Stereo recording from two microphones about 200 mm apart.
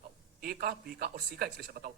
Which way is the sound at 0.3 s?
50° right (ahead or behind).